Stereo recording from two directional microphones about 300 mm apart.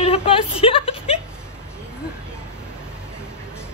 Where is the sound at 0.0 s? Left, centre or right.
Centre.